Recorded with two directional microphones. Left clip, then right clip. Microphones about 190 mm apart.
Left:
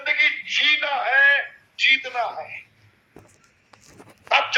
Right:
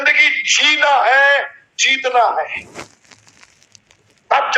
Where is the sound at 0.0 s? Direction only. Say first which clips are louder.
Right 8 dB; 50° right (ahead or behind).